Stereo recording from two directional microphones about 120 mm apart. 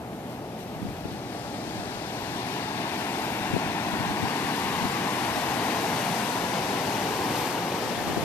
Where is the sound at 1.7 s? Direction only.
20° left (ahead or behind).